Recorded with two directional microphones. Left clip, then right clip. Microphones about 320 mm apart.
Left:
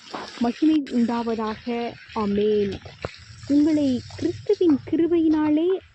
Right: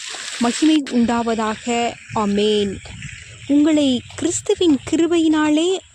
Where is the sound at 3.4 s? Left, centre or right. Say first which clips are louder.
Right 5 dB; right.